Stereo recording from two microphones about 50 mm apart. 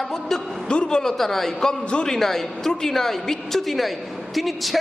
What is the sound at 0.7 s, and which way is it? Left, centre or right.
Speech, centre.